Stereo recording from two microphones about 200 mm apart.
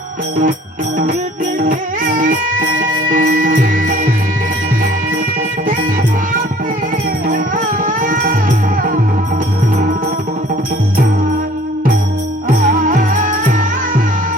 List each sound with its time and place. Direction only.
1.5 s music: 40° right (ahead or behind)
7.3 s music: 40° right (ahead or behind)
12.5 s music: 40° right (ahead or behind)